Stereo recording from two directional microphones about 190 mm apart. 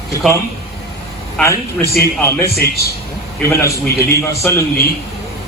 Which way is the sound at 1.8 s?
55° left (ahead or behind).